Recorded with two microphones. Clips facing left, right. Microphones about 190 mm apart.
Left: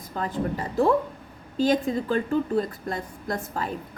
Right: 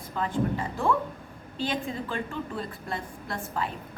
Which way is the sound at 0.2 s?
40° left (ahead or behind).